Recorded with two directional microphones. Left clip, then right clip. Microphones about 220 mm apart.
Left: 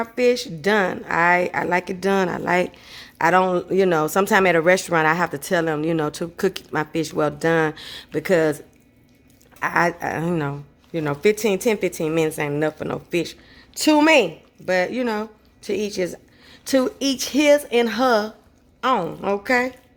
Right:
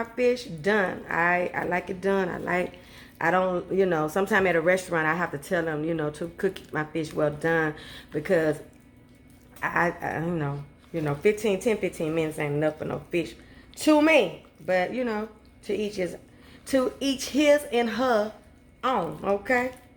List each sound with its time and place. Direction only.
0.0 s a woman's voice: 45° left (ahead or behind)
9.6 s a woman's voice: 50° left (ahead or behind)